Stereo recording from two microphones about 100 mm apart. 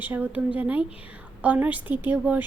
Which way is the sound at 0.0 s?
20° right (ahead or behind).